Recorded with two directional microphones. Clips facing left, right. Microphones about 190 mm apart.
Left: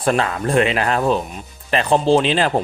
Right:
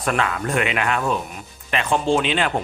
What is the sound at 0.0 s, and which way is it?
Speech, 30° left (ahead or behind).